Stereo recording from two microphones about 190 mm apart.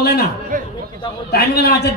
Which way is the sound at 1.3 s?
55° left (ahead or behind).